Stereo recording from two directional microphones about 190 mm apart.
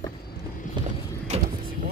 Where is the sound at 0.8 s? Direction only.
25° right (ahead or behind).